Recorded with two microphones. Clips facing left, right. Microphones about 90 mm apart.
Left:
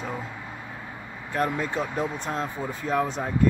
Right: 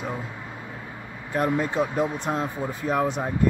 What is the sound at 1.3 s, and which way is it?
Speech, 15° right (ahead or behind).